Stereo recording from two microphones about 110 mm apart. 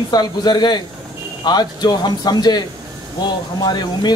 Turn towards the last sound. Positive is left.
turn(degrees=40)  # may be behind; listen again after turning